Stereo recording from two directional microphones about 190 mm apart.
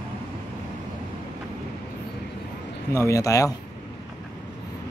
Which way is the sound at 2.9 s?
15° left (ahead or behind).